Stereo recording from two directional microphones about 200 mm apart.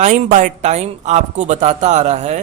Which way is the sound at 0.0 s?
35° right (ahead or behind).